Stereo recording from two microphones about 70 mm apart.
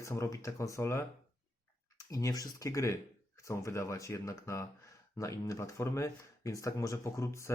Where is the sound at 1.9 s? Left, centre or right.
Left.